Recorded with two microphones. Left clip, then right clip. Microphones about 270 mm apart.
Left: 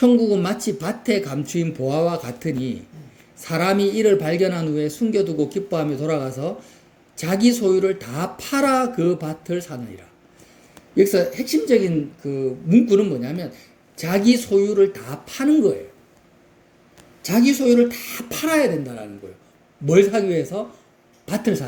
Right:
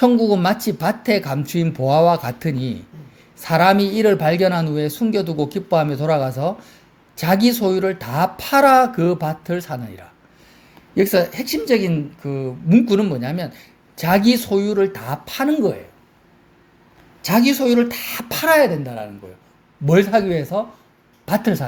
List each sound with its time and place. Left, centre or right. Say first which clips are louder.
0.0 s speech: right 2 dB; right
10.9 s speech: even; right
17.2 s speech: right 1 dB; right
21.2 s speech: right 3 dB; right